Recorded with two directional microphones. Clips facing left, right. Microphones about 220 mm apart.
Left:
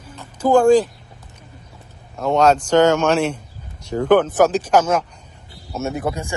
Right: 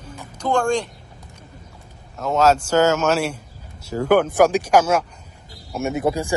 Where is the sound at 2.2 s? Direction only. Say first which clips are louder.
Left 2 dB; 5° right (ahead or behind).